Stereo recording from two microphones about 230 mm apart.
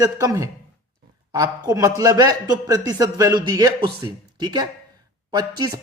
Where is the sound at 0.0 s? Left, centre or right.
Centre.